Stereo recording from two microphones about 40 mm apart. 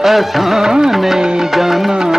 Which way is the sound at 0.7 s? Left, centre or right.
Centre.